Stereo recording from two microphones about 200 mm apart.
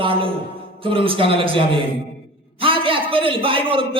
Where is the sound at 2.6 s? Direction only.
25° right (ahead or behind).